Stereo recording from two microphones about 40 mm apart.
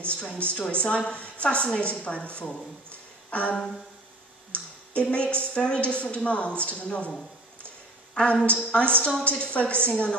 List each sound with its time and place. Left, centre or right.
0.1 s a woman's voice: left
3.3 s a sound: left
4.5 s a woman's voice: left
8.1 s a woman's voice: left